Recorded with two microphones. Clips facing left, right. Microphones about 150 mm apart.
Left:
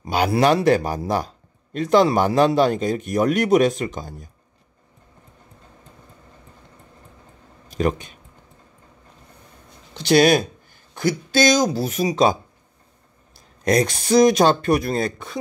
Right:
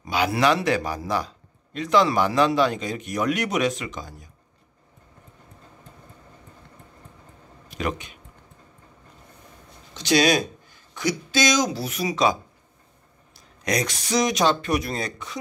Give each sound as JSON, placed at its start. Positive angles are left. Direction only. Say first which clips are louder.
{"t": 0.7, "sound": "speech", "louder": "left 6 dB", "side_deg": 45}
{"t": 7.6, "sound": "speech", "louder": "left 6 dB", "side_deg": 45}
{"t": 10.0, "sound": "speech", "louder": "left 5 dB", "side_deg": 55}
{"t": 13.7, "sound": "speech", "louder": "left 7 dB", "side_deg": 45}